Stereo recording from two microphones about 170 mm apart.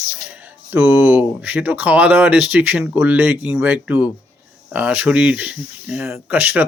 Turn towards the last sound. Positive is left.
turn(degrees=-10)  # may be behind; listen again after turning